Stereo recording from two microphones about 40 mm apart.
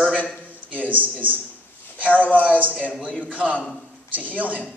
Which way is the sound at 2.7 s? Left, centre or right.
Left.